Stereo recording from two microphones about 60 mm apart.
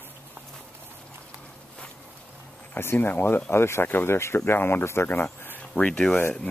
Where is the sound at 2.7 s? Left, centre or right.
Left.